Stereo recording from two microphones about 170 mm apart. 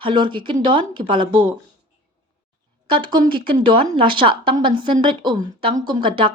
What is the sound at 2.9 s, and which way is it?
A woman's voice, 30° right (ahead or behind).